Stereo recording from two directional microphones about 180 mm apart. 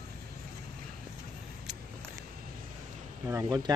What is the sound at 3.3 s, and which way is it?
Speech, 20° right (ahead or behind).